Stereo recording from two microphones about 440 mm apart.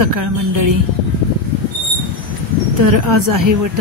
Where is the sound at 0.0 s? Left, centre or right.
Right.